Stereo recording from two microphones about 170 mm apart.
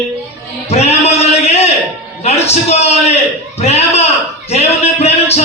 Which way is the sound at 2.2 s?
40° left (ahead or behind).